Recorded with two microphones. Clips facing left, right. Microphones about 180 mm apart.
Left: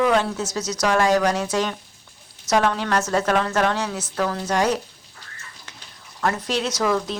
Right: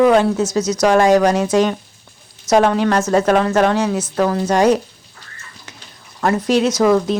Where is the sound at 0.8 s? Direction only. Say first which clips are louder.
Right 6 dB; 20° right (ahead or behind).